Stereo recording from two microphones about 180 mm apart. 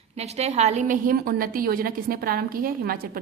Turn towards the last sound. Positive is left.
turn(degrees=-55)  # may be behind; listen again after turning